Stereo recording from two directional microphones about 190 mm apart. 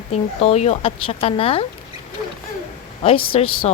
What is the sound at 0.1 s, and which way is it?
Speech, 35° left (ahead or behind).